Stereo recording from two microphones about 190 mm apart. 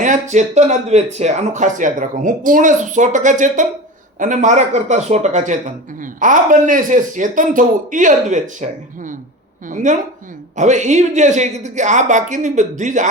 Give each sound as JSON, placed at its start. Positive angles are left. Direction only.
{"t": 0.0, "sound": "a man's voice", "side_deg": -40}